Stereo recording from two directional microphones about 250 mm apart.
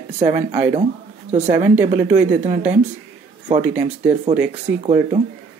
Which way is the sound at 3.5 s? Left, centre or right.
Centre.